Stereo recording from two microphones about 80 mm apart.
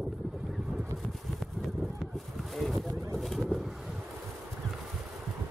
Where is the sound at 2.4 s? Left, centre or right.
Centre.